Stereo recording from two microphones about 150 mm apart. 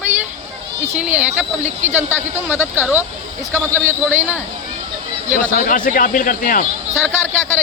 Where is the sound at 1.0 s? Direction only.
10° right (ahead or behind).